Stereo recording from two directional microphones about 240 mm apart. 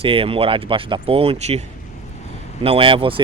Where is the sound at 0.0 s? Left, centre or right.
Right.